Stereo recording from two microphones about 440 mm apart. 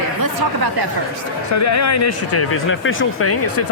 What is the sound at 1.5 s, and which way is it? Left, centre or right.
Speech, left.